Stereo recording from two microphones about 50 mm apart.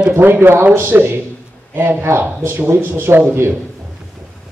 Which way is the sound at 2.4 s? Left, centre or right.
Right.